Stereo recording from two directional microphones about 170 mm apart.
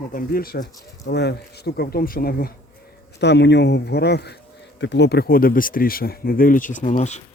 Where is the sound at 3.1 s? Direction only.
90° left; by 4.3 s 75° left (ahead or behind).